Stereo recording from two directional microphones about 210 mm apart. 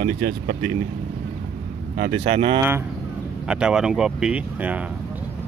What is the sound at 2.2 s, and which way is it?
Speech, 30° right (ahead or behind).